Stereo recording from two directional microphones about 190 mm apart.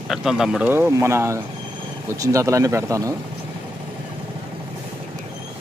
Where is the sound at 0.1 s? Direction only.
Centre (ahead or behind).